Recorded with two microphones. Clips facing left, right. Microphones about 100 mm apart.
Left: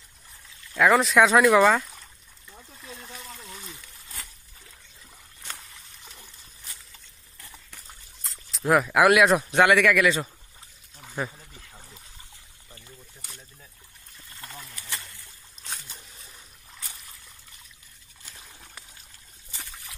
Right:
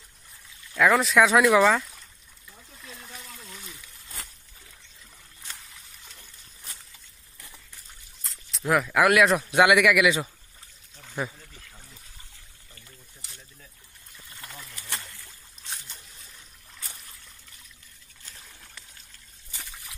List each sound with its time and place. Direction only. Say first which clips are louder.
0.7 s speech: left 1 dB; centre (ahead or behind)
3.0 s water: left 2 dB; centre (ahead or behind)
8.2 s speech: left 3 dB; centre (ahead or behind)
9.5 s a man's voice: even; 10° right (ahead or behind)
11.0 s pour: even; 10° left (ahead or behind)
11.3 s a sound: left 1 dB; 20° left (ahead or behind)
14.4 s a sound: left 1 dB; centre (ahead or behind)
16.7 s a sound: even; centre (ahead or behind)
18.2 s trickle: left 1 dB; 15° left (ahead or behind)